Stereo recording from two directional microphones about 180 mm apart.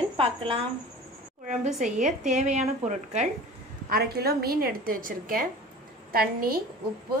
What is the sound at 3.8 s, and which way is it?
A woman's voice, 60° right (ahead or behind).